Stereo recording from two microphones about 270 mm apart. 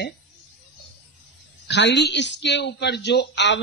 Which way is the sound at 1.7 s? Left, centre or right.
Left.